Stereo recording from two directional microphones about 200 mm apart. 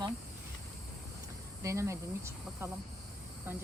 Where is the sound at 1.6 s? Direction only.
15° right (ahead or behind).